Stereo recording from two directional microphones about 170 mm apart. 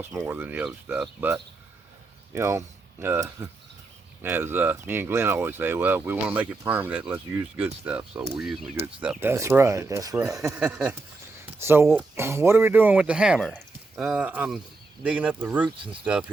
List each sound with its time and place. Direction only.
0.0 s speech: 15° right (ahead or behind)
2.3 s speech: 15° right (ahead or behind)
10.6 s speech: 5° right (ahead or behind)